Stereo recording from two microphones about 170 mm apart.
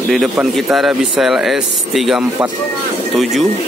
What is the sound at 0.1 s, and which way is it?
A man's voice, centre (ahead or behind).